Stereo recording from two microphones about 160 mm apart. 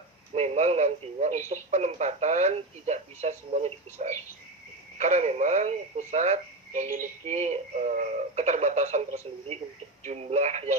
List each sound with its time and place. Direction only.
0.3 s speech: 45° right (ahead or behind)